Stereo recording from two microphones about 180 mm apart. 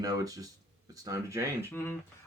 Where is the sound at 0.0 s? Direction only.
20° right (ahead or behind).